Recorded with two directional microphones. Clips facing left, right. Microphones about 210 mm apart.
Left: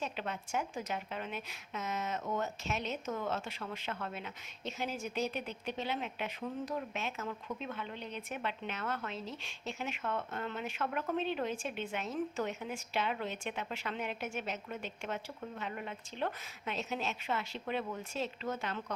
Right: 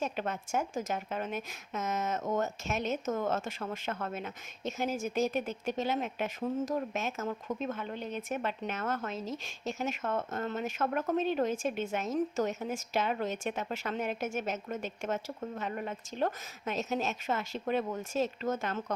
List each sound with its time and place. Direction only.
0.0 s a woman's voice: 45° right (ahead or behind)